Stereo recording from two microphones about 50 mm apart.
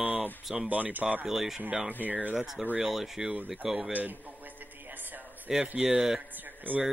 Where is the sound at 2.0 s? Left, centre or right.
Right.